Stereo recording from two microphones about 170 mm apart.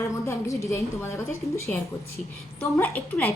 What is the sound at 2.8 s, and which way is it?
Speech, 10° left (ahead or behind).